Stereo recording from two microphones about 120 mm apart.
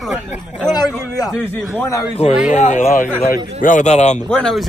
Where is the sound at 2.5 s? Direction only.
80° left.